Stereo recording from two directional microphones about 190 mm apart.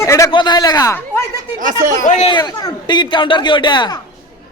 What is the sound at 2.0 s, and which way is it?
Speech, 35° left (ahead or behind).